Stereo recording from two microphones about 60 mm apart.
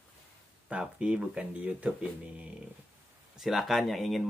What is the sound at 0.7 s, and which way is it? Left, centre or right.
Speech, centre.